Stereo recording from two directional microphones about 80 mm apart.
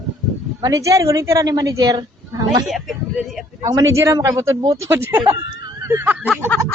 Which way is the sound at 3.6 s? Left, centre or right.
Right.